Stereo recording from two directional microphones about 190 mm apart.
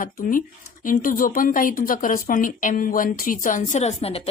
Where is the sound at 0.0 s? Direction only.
45° left (ahead or behind).